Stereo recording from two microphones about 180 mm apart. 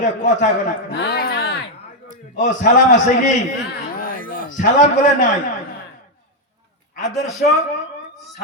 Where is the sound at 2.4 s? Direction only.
45° left (ahead or behind).